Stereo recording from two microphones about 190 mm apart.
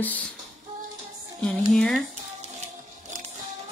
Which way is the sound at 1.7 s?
Centre (ahead or behind).